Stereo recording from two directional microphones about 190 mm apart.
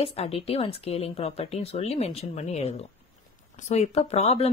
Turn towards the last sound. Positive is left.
turn(degrees=30)  # may be behind; listen again after turning